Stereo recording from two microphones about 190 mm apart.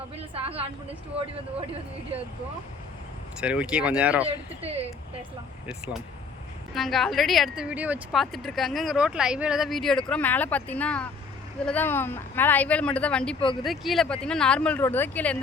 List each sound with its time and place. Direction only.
0.3 s a woman's voice: 30° right (ahead or behind)
3.4 s speech: 5° right (ahead or behind)
4.6 s a woman's voice: 30° right (ahead or behind)
5.6 s a woman's voice: 5° right (ahead or behind)
13.4 s speech: 25° left (ahead or behind)
13.7 s a woman's voice: centre (ahead or behind)